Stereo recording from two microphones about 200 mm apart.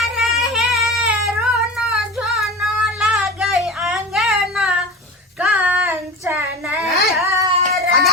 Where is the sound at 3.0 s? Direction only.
Centre (ahead or behind).